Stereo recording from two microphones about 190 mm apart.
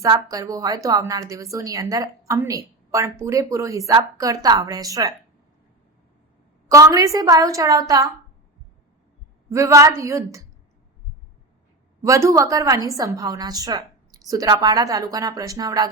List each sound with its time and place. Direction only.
0.0 s a woman's voice: 20° right (ahead or behind)
6.7 s a woman's voice: 15° right (ahead or behind)
9.5 s a woman's voice: 15° right (ahead or behind)
12.0 s a woman's voice: 15° right (ahead or behind)